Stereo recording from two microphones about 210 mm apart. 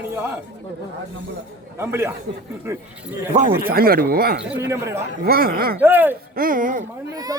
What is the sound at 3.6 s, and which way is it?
Speech, 45° right (ahead or behind).